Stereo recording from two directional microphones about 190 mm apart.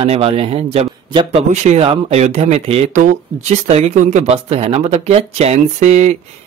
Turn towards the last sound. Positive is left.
turn(degrees=-40)  # may be behind; listen again after turning